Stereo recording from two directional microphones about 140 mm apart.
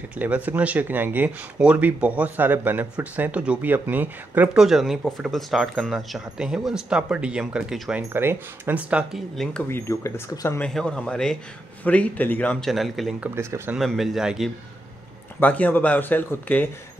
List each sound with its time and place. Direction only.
0.2 s speech: 10° right (ahead or behind)
8.1 s speech: 15° right (ahead or behind)
9.7 s speech: 20° left (ahead or behind)
10.6 s a man's voice: 5° left (ahead or behind)
13.3 s speech: 20° right (ahead or behind)
13.7 s speech: centre (ahead or behind)
15.4 s a man's voice: 10° left (ahead or behind)